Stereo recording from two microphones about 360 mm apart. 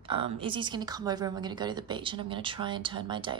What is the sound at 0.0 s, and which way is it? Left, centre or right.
A woman's voice, centre.